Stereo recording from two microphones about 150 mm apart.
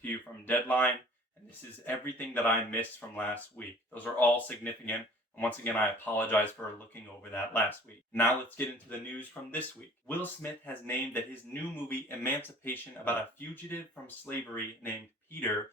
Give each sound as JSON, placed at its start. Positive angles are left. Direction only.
{"t": 0.0, "sound": "speech", "side_deg": 10}